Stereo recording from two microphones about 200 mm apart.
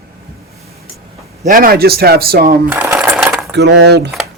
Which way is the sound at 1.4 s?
45° right (ahead or behind).